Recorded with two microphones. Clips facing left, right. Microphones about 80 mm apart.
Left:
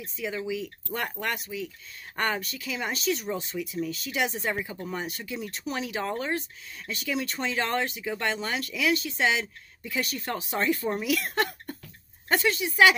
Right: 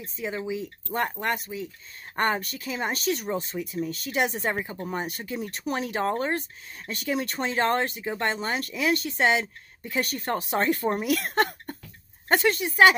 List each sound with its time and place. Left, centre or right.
0.0 s speech: right